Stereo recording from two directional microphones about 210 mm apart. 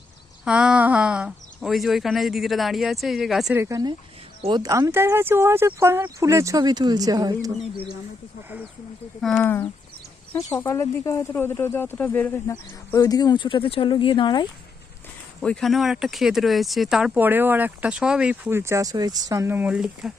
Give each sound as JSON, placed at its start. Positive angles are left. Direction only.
{"t": 0.4, "sound": "speech", "side_deg": -5}
{"t": 3.6, "sound": "speech", "side_deg": -15}
{"t": 9.4, "sound": "speech", "side_deg": 10}
{"t": 15.4, "sound": "speech", "side_deg": 0}